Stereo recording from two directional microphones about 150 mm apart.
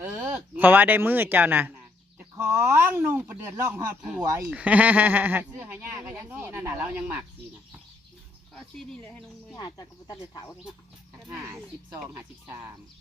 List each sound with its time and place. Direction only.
0.0 s speech: 15° right (ahead or behind)
4.5 s speech: 10° right (ahead or behind)
8.5 s speech: 5° left (ahead or behind)
9.6 s speech: 25° left (ahead or behind)
11.3 s speech: 20° right (ahead or behind)